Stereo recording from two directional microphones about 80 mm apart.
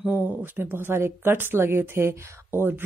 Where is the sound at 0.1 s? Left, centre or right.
Right.